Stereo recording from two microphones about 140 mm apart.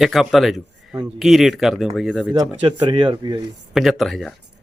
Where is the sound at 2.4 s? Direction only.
40° right (ahead or behind).